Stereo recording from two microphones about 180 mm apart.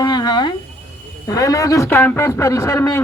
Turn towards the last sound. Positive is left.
turn(degrees=15)  # may be behind; listen again after turning